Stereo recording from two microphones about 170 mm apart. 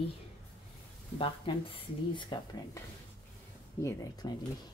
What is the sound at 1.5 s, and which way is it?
Speech, 30° left (ahead or behind).